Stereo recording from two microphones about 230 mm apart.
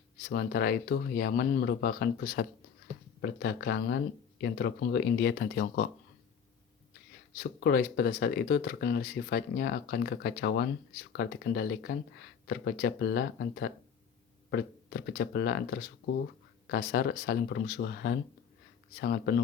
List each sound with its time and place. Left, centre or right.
0.3 s speech: left
7.3 s speech: left